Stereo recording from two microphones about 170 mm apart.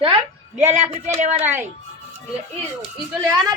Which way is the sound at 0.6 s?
40° right (ahead or behind).